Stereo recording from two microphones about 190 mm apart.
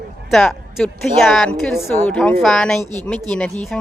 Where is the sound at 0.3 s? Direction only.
Centre (ahead or behind).